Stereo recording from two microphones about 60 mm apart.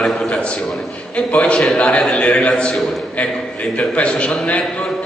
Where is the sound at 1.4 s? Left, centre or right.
Centre.